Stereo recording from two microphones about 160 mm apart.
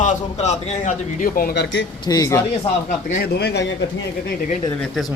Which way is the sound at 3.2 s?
90° left.